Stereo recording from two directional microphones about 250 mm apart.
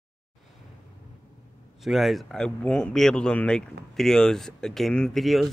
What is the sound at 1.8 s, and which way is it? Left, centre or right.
Speech, centre.